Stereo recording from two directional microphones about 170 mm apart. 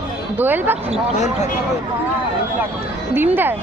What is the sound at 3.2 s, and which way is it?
Speech, 10° right (ahead or behind).